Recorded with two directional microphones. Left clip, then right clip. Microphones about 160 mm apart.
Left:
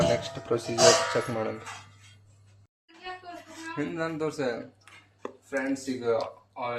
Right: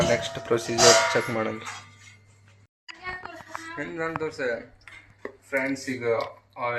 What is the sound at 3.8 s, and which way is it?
Speech, 90° left.